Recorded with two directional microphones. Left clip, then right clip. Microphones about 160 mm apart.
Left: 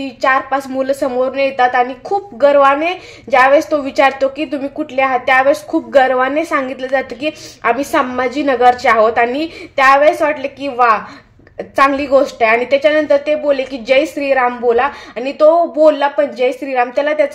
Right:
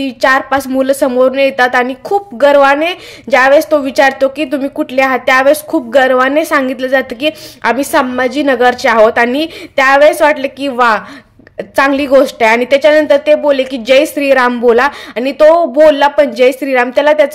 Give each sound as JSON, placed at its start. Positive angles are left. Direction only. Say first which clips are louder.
{"t": 0.0, "sound": "a woman's voice", "louder": "right 4 dB", "side_deg": -35}